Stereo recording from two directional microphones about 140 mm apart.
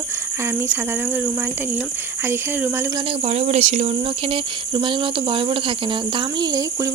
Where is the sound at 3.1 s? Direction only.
45° right (ahead or behind).